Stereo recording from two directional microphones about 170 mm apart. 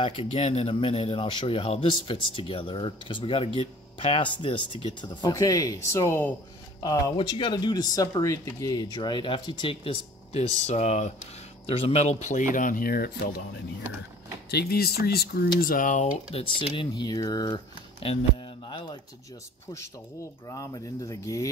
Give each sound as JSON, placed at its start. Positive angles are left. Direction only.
{"t": 0.0, "sound": "speech", "side_deg": 35}
{"t": 14.5, "sound": "speech", "side_deg": 65}
{"t": 16.3, "sound": "speech", "side_deg": 30}
{"t": 18.7, "sound": "speech", "side_deg": 25}
{"t": 20.4, "sound": "speech", "side_deg": 20}